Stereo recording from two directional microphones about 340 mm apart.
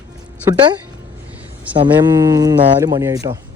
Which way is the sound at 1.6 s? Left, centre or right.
Centre.